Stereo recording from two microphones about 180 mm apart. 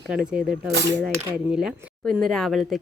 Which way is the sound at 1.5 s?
5° right (ahead or behind).